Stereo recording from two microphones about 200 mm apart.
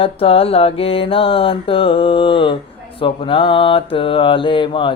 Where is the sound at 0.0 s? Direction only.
30° left (ahead or behind).